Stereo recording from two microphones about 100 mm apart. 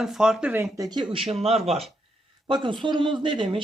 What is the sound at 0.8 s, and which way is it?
Speech, 45° right (ahead or behind).